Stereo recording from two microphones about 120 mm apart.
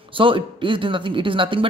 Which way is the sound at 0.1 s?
45° right (ahead or behind).